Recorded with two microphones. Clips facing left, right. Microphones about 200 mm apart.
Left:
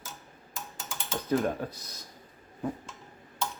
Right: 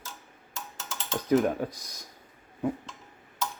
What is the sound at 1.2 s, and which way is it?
Speech, 10° right (ahead or behind).